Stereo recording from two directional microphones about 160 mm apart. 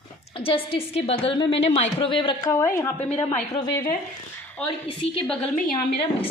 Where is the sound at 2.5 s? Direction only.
15° left (ahead or behind).